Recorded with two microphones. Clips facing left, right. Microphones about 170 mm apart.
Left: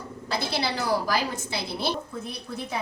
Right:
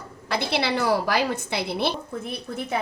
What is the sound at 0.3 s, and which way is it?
A woman's voice, 65° right (ahead or behind).